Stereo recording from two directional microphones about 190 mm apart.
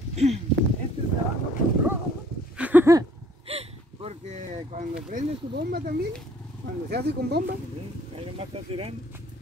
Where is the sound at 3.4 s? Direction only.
30° right (ahead or behind).